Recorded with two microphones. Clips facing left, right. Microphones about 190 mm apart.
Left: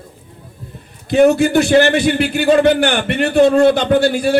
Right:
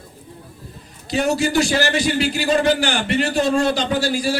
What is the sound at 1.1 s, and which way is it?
A man's voice, 55° left (ahead or behind).